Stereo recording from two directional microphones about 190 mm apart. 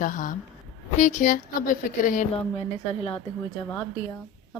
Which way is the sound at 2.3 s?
30° left (ahead or behind).